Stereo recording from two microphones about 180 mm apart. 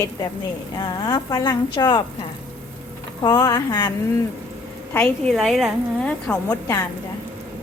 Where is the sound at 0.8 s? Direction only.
20° left (ahead or behind).